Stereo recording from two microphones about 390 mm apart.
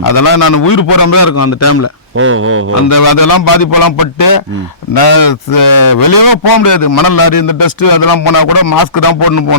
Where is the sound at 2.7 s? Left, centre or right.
Left.